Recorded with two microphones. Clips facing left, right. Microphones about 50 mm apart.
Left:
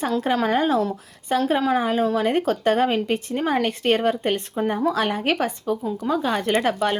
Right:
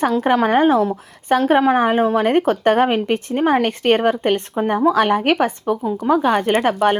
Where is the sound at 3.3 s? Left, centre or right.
Right.